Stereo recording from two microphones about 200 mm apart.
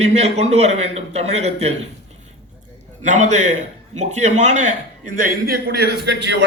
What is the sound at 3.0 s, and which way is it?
A man's voice, 40° right (ahead or behind).